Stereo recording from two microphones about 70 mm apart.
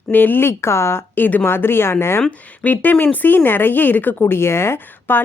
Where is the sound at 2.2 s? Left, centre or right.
Centre.